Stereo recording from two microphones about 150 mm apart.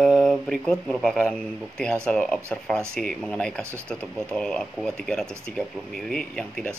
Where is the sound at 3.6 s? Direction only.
15° right (ahead or behind).